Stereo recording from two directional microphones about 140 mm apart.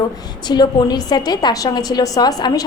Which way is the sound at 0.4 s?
30° left (ahead or behind).